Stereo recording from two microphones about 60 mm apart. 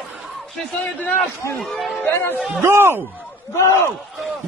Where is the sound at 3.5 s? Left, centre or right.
Left.